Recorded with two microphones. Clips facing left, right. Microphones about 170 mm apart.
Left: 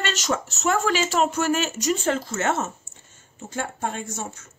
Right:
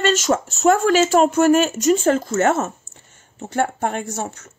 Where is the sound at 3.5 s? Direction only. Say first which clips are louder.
Right 8 dB; 60° right (ahead or behind).